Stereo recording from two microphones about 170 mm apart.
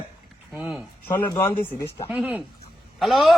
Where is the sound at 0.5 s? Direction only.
5° right (ahead or behind).